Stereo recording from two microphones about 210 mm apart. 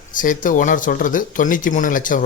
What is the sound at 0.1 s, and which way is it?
Speech, 40° left (ahead or behind).